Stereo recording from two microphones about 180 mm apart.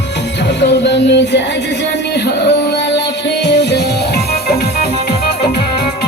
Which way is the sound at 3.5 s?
70° left (ahead or behind).